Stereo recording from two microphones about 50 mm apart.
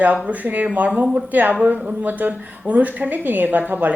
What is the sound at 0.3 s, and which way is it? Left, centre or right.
A woman's voice, right.